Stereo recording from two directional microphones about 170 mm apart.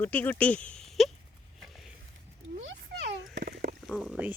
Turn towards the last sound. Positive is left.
turn(degrees=5)  # may be behind; listen again after turning